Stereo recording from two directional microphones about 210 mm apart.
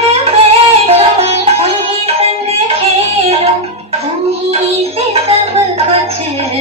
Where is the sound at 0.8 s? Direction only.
30° right (ahead or behind).